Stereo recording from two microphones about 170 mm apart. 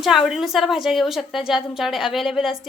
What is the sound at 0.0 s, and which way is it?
A woman's voice, centre (ahead or behind).